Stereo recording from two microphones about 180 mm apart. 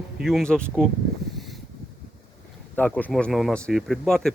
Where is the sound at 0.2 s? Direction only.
Centre (ahead or behind).